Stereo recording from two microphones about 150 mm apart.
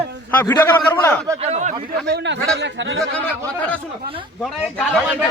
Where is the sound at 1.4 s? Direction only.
45° right (ahead or behind).